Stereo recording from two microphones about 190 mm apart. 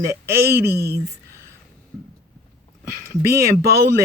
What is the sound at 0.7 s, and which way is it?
Speech, 55° right (ahead or behind).